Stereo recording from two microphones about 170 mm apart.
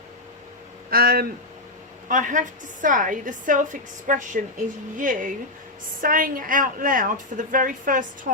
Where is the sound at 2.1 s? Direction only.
50° right (ahead or behind).